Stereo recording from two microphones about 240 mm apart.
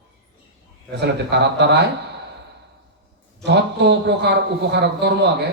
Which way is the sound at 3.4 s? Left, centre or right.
Right.